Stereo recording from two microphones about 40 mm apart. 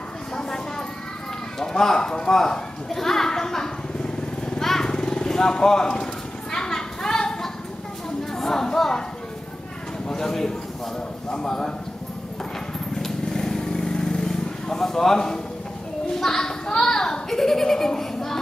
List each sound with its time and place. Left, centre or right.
0.4 s a sound: centre
4.6 s vehicle: centre
6.5 s a sound: centre
8.2 s speech: centre
10.0 s a child's voice: centre
12.9 s vehicle: centre
16.2 s a child's voice: centre